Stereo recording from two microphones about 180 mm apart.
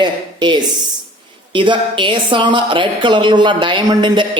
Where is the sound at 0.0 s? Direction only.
25° right (ahead or behind).